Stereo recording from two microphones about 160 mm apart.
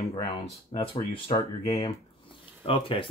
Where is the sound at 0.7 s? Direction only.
35° left (ahead or behind).